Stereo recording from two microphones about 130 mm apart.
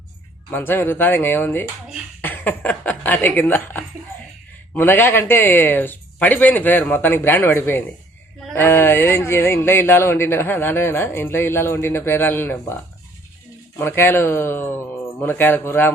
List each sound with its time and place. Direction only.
0.5 s speech: 15° left (ahead or behind)
13.7 s speech: 15° left (ahead or behind)